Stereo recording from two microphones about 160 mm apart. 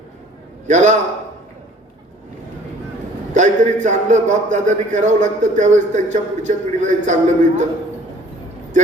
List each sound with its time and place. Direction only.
0.7 s a man's voice: 50° right (ahead or behind)
3.3 s a man's voice: 50° right (ahead or behind)